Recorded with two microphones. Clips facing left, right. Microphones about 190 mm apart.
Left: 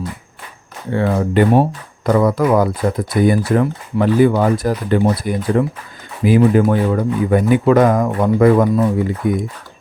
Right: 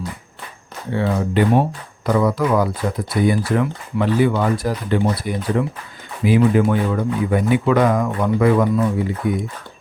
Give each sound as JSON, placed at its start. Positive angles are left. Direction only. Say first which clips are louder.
{"t": 0.9, "sound": "speech", "louder": "left 4 dB", "side_deg": 50}